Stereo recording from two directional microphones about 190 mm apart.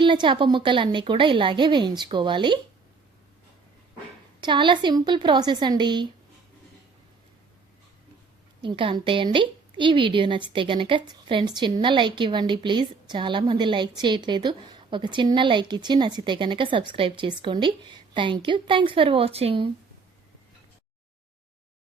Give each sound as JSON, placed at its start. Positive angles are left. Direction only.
{"t": 0.0, "sound": "a woman's voice", "side_deg": -25}
{"t": 4.4, "sound": "a woman's voice", "side_deg": -25}
{"t": 8.6, "sound": "a woman's voice", "side_deg": -25}